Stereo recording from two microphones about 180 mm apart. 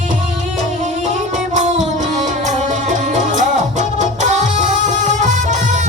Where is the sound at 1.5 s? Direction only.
45° right (ahead or behind).